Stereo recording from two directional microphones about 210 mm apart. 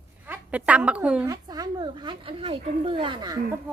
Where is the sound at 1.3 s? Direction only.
20° right (ahead or behind).